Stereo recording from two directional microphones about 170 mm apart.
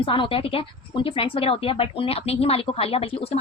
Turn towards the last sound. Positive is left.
turn(degrees=35)  # may be behind; listen again after turning